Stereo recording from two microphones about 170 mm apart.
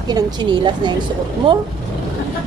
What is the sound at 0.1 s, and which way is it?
Speech, 25° right (ahead or behind).